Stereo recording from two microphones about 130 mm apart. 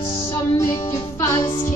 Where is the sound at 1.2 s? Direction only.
25° left (ahead or behind).